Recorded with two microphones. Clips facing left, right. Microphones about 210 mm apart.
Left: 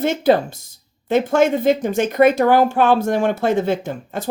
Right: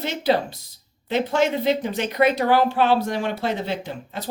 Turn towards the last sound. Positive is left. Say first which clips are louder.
# left 5 dB
turn(degrees=50)  # may be behind; listen again after turning